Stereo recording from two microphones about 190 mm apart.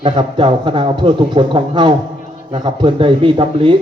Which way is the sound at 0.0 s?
25° right (ahead or behind).